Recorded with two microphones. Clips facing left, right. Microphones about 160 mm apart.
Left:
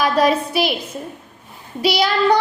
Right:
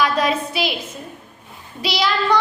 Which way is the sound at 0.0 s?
45° left (ahead or behind).